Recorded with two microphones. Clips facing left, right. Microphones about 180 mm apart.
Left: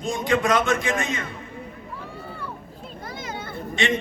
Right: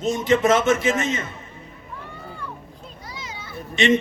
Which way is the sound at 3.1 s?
55° left (ahead or behind).